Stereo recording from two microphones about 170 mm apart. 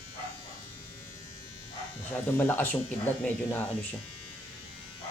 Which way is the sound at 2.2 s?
10° left (ahead or behind).